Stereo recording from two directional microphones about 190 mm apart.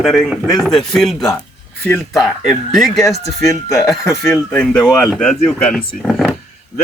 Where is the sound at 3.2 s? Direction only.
15° left (ahead or behind).